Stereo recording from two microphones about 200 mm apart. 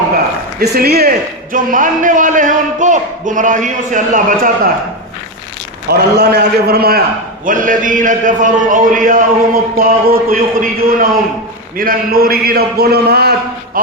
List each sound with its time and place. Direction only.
0.6 s a man's voice: 55° right (ahead or behind)
5.9 s a man's voice: 55° right (ahead or behind)